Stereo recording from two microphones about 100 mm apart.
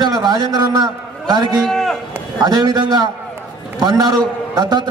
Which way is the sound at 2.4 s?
45° right (ahead or behind).